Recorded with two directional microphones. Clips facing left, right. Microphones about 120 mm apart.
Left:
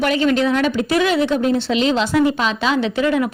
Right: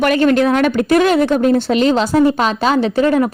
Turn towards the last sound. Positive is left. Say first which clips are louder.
# right 4 dB
turn(degrees=-40)  # may be behind; listen again after turning